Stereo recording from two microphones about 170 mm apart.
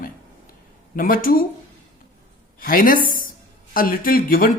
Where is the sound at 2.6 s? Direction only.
60° left (ahead or behind).